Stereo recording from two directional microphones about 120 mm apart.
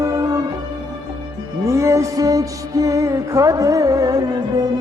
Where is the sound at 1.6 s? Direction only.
25° right (ahead or behind).